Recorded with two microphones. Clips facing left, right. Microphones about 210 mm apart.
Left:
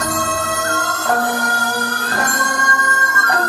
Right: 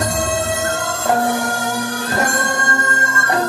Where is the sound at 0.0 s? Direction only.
25° right (ahead or behind).